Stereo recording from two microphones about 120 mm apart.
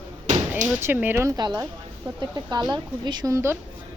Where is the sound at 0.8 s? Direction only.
20° right (ahead or behind).